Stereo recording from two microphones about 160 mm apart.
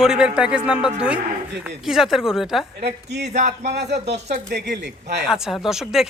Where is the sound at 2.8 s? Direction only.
90° right.